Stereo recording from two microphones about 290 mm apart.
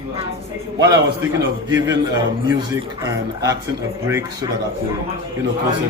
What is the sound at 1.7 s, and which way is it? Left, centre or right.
A man's voice, centre.